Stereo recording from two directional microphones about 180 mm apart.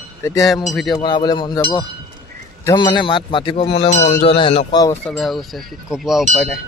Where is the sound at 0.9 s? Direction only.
25° left (ahead or behind).